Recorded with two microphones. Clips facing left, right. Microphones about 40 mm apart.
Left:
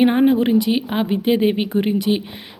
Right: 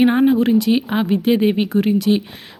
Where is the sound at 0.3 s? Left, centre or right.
Centre.